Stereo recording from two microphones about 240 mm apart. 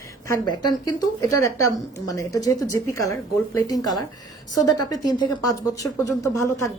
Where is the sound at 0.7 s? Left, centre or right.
Centre.